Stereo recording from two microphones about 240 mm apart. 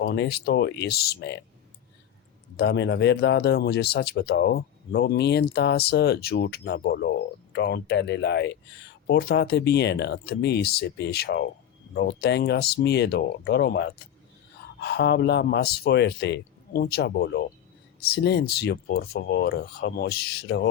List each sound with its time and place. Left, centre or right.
0.0 s speech: left
2.6 s speech: left